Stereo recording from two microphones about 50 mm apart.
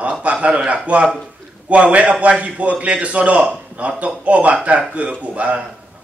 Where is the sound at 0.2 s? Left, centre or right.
Right.